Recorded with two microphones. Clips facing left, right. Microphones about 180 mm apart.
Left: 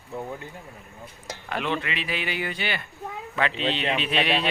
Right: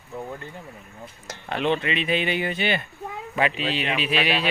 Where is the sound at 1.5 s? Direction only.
25° right (ahead or behind).